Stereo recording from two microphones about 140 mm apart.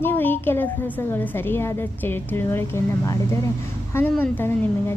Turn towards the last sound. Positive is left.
turn(degrees=15)  # may be behind; listen again after turning